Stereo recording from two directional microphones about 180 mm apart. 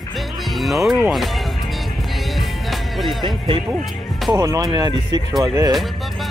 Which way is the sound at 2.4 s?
Centre (ahead or behind).